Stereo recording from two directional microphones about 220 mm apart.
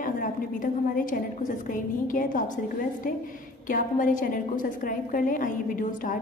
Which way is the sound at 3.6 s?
35° left (ahead or behind).